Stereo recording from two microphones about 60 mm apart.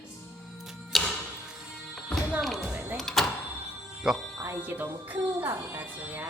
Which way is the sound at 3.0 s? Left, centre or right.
Centre.